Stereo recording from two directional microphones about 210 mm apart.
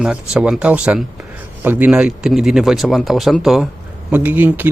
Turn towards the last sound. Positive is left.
turn(degrees=-10)  # may be behind; listen again after turning